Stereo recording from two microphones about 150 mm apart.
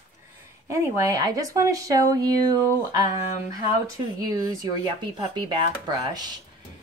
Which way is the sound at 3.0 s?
50° left (ahead or behind).